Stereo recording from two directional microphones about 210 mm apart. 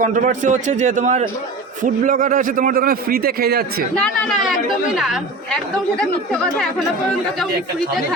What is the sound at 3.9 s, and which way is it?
Speech, 5° left (ahead or behind).